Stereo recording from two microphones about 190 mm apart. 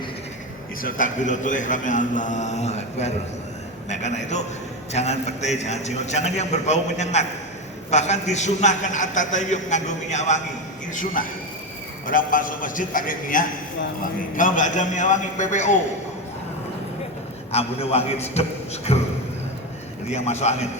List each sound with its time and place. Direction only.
0.8 s a man's voice: 45° left (ahead or behind)
17.5 s a man's voice: 30° left (ahead or behind)
20.1 s a man's voice: 35° left (ahead or behind)